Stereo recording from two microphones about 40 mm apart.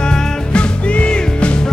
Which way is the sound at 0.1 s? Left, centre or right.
Left.